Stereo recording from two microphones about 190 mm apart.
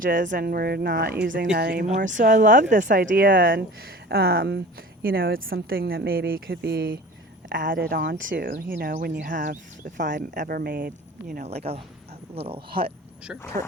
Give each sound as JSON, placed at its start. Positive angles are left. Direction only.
{"t": 0.0, "sound": "speech", "side_deg": -45}
{"t": 1.9, "sound": "speech", "side_deg": -40}
{"t": 9.2, "sound": "speech", "side_deg": -45}
{"t": 11.6, "sound": "speech", "side_deg": -30}